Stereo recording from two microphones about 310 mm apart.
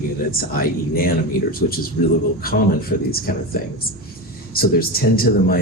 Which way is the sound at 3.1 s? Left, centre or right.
Left.